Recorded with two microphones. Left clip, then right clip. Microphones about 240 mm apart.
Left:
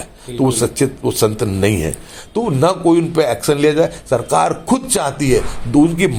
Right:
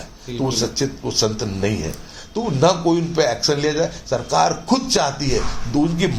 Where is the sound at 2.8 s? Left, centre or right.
Left.